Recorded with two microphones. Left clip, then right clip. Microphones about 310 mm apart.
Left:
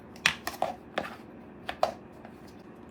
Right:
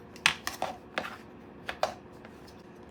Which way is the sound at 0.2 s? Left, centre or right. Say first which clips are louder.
Even; centre.